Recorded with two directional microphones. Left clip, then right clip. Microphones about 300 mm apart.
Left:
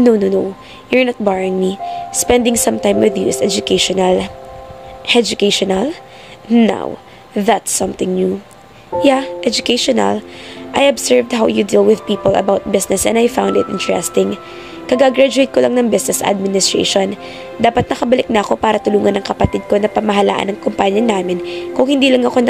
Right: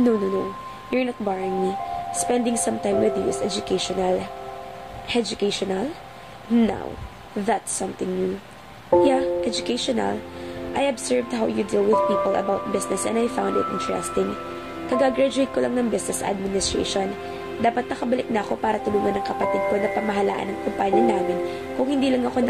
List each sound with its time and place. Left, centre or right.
0.8 s speech: left